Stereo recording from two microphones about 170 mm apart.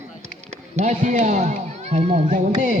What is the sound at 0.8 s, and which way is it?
Speech, 45° right (ahead or behind).